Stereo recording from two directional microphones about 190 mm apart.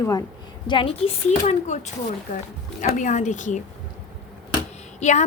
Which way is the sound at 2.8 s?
40° left (ahead or behind).